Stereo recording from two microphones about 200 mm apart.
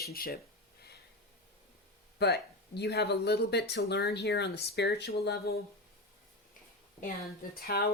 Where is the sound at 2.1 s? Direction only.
55° left (ahead or behind).